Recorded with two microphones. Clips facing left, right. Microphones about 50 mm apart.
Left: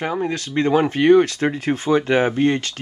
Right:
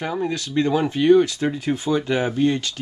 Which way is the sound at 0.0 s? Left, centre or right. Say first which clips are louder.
Left 2 dB; left.